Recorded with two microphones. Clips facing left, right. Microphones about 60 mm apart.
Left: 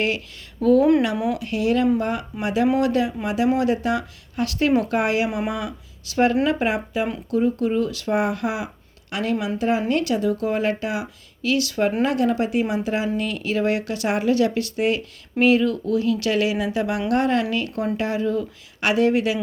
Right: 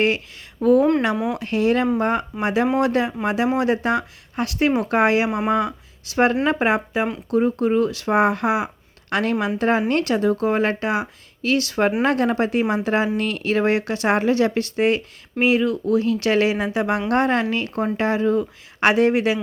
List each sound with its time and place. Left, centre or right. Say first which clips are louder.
0.6 s speech: right 1 dB; right
1.3 s speech: right 2 dB; right
9.0 s speech: right 3 dB; right
15.4 s speech: left 1 dB; right